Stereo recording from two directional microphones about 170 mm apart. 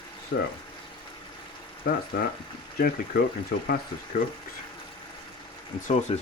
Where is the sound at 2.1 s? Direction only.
55° left (ahead or behind).